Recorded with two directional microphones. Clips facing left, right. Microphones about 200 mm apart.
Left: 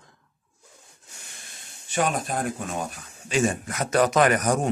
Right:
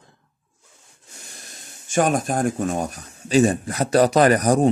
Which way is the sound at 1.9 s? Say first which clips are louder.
Right 6 dB; 45° right (ahead or behind).